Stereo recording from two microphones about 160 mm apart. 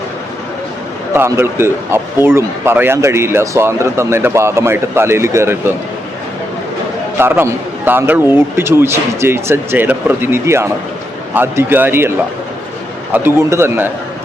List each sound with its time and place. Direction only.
1.1 s a man's voice: 15° right (ahead or behind)
7.2 s a man's voice: 15° right (ahead or behind)
13.1 s a man's voice: 15° right (ahead or behind)